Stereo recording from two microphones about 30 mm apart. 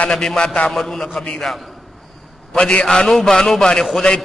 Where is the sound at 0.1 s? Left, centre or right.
Centre.